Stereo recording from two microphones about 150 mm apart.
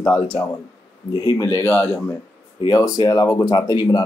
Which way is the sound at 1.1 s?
25° left (ahead or behind).